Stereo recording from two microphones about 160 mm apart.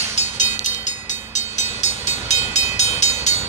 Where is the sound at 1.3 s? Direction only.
45° left (ahead or behind).